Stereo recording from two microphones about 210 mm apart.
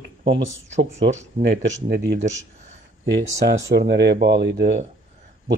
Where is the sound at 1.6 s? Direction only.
55° right (ahead or behind).